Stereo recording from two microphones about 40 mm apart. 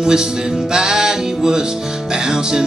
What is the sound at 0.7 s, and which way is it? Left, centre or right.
Music, centre.